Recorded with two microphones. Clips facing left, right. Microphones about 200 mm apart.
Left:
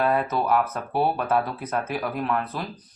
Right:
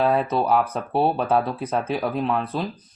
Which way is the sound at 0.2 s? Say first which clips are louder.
Right 2 dB; 30° right (ahead or behind).